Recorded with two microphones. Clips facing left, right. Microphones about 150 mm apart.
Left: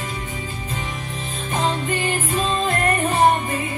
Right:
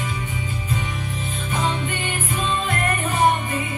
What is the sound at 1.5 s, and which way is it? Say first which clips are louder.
Music: left 3 dB; 35° left (ahead or behind).